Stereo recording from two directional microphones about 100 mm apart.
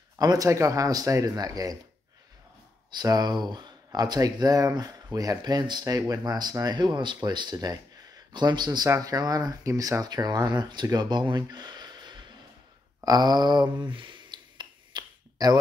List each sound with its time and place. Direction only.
0.2 s speech: 40° right (ahead or behind)
2.9 s speech: 45° right (ahead or behind)
13.0 s a sound: 45° right (ahead or behind)